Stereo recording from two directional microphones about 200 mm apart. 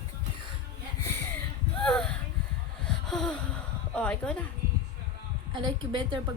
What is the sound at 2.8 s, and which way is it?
Gasp, 5° left (ahead or behind).